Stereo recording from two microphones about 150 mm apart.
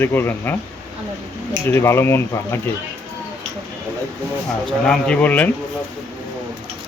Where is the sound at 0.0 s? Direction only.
15° left (ahead or behind).